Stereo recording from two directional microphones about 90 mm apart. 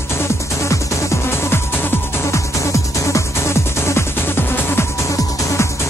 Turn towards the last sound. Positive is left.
turn(degrees=35)  # may be behind; listen again after turning